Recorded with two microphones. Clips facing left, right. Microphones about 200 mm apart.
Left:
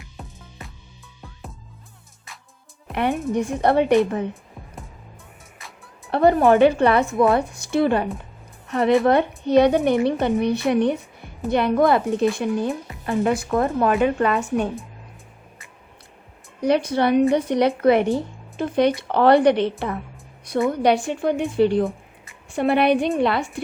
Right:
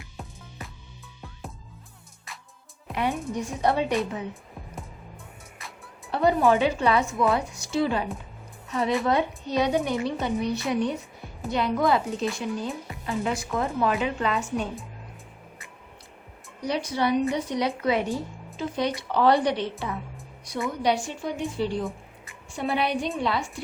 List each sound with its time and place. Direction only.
2.9 s speech: 60° left (ahead or behind)
6.1 s speech: 60° left (ahead or behind)
16.6 s speech: 60° left (ahead or behind)